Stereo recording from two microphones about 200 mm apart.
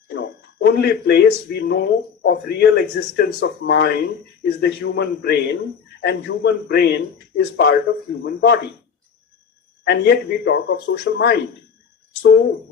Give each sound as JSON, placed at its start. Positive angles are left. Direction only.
{"t": 0.1, "sound": "a man's voice", "side_deg": 55}
{"t": 9.8, "sound": "a man's voice", "side_deg": 55}